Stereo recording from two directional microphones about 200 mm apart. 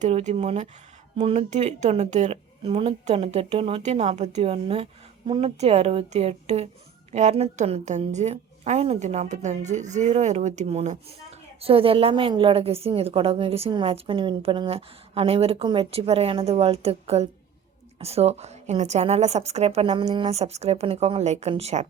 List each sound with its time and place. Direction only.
0.0 s a woman's voice: 35° right (ahead or behind)